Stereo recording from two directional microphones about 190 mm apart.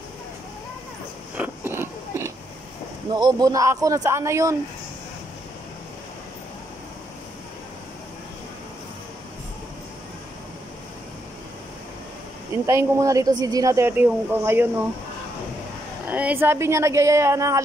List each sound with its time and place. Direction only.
1.3 s biting: 10° right (ahead or behind)
3.1 s speech: 20° right (ahead or behind)
12.6 s speech: 15° right (ahead or behind)
16.1 s speech: 5° right (ahead or behind)